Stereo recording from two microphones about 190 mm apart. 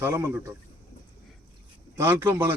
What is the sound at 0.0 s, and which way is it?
Speech, 10° right (ahead or behind).